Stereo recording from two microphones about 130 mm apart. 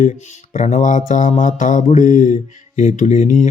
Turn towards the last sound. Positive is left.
turn(degrees=70)  # may be behind; listen again after turning